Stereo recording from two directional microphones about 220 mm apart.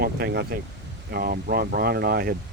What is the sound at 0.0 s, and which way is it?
Speech, 45° right (ahead or behind).